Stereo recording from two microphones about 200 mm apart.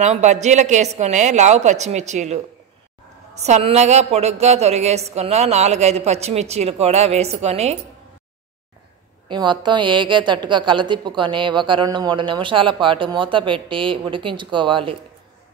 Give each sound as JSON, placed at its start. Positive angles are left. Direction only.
{"t": 0.0, "sound": "speech", "side_deg": -35}
{"t": 9.3, "sound": "a woman's voice", "side_deg": -20}